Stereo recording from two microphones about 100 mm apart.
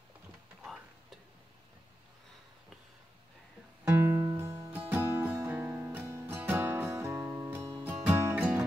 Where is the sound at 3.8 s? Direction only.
20° right (ahead or behind).